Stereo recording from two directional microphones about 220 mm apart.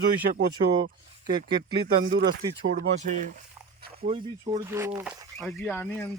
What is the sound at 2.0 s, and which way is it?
Speech, 55° right (ahead or behind).